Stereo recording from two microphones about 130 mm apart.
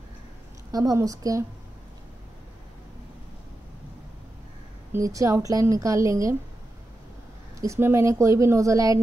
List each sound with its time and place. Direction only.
0.7 s speech: 30° right (ahead or behind)
4.9 s speech: 25° right (ahead or behind)
7.6 s speech: 20° right (ahead or behind)